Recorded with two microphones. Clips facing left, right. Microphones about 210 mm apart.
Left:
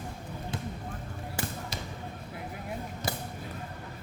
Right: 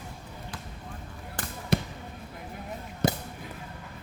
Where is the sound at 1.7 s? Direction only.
60° right (ahead or behind).